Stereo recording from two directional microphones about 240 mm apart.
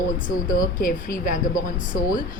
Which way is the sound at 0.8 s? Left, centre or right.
Left.